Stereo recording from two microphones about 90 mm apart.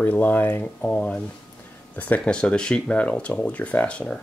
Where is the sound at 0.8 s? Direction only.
10° left (ahead or behind).